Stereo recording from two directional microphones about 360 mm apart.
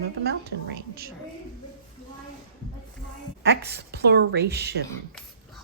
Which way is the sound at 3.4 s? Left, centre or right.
Right.